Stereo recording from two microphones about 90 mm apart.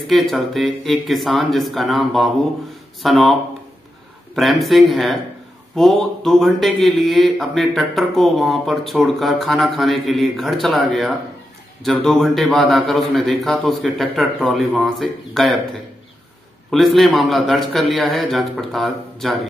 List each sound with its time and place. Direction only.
0.1 s speech: centre (ahead or behind)
4.4 s speech: centre (ahead or behind)
16.7 s speech: centre (ahead or behind)